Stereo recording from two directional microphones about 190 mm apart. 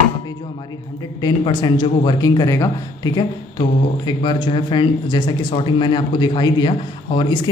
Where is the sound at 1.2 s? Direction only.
25° left (ahead or behind).